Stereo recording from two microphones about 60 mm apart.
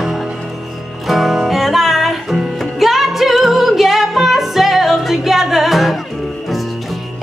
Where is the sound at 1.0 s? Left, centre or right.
Centre.